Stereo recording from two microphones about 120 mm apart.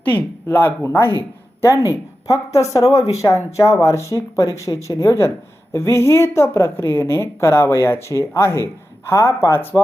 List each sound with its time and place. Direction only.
0.0 s a woman's voice: 15° left (ahead or behind)